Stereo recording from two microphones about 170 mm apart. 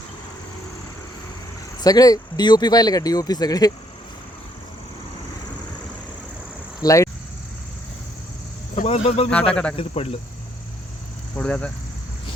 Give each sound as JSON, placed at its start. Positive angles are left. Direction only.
{"t": 1.8, "sound": "speech", "side_deg": 20}
{"t": 6.8, "sound": "speech", "side_deg": 20}
{"t": 8.7, "sound": "cricket", "side_deg": 45}
{"t": 9.0, "sound": "speech", "side_deg": 35}
{"t": 9.3, "sound": "speech", "side_deg": 5}
{"t": 9.7, "sound": "speech", "side_deg": 35}
{"t": 11.3, "sound": "speech", "side_deg": 5}